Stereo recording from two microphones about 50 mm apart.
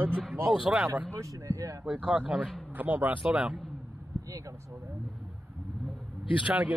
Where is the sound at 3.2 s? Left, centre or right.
Right.